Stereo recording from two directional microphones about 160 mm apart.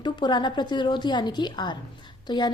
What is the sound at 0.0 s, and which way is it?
Speech, 30° left (ahead or behind).